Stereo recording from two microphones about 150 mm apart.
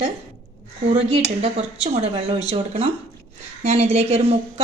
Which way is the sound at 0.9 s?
45° right (ahead or behind).